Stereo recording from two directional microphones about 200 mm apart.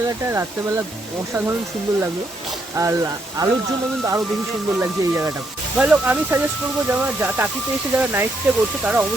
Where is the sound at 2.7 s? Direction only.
15° right (ahead or behind).